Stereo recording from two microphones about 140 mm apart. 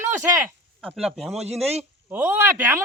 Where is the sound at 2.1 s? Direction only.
15° right (ahead or behind).